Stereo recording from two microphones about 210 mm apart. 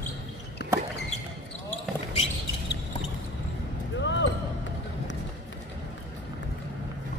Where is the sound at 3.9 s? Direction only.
60° left (ahead or behind).